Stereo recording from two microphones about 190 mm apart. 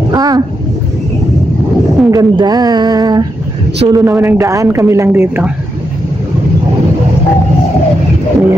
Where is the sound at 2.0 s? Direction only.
20° right (ahead or behind).